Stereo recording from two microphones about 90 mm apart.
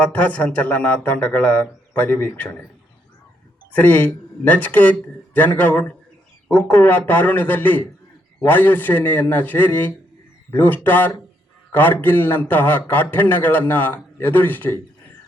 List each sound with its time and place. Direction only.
0.0 s a man's voice: 15° left (ahead or behind)
3.8 s a man's voice: 20° left (ahead or behind)